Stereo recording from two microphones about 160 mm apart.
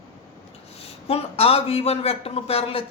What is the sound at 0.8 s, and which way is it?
A man's voice, 40° left (ahead or behind).